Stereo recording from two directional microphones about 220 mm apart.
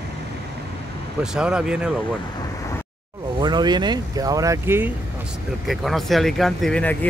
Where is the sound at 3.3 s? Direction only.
20° right (ahead or behind).